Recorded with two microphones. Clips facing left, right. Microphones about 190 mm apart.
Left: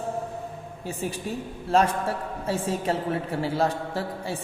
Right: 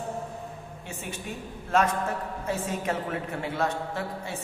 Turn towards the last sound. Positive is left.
turn(degrees=35)  # may be behind; listen again after turning